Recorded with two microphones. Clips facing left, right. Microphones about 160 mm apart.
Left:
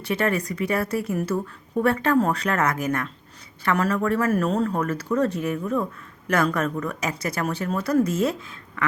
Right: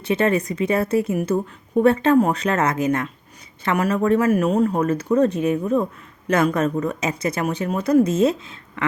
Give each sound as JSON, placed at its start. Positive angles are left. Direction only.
{"t": 0.0, "sound": "a woman's voice", "side_deg": -20}